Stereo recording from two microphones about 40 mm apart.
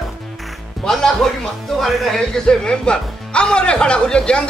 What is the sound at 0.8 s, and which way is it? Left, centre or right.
Speech, centre.